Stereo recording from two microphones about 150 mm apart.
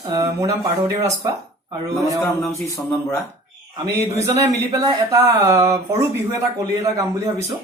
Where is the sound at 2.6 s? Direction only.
20° left (ahead or behind).